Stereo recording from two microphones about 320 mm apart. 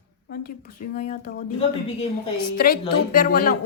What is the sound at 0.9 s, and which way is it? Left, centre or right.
Speech, left.